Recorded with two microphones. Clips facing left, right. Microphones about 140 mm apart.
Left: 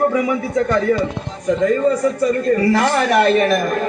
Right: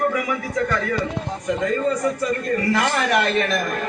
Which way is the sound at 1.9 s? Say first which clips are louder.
Left 5 dB; 30° left (ahead or behind).